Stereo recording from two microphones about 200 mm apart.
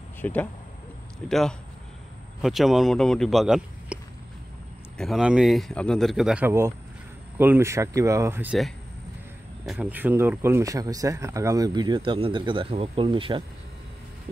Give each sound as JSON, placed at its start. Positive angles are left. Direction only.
{"t": 0.2, "sound": "speech", "side_deg": 10}
{"t": 2.4, "sound": "speech", "side_deg": 0}